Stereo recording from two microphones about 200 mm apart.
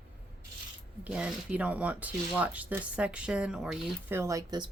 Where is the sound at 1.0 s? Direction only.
5° right (ahead or behind).